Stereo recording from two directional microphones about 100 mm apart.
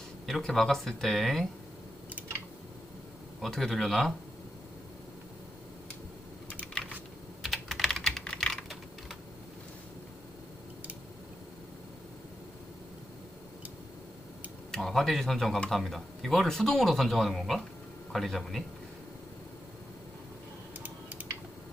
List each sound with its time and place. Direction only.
0.3 s speech: 5° left (ahead or behind)
3.4 s speech: 5° left (ahead or behind)
7.4 s typing: centre (ahead or behind)
14.7 s speech: 5° left (ahead or behind)
20.8 s typing: 15° right (ahead or behind)